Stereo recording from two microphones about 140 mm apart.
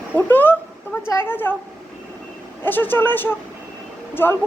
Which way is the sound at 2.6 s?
15° left (ahead or behind).